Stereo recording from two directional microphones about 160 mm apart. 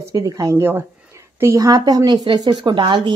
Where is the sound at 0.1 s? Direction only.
20° right (ahead or behind).